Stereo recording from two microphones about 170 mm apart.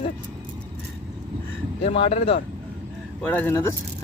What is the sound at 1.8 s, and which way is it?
Speech, 35° left (ahead or behind).